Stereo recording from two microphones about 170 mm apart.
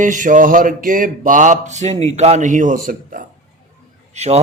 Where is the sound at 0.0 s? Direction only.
50° right (ahead or behind).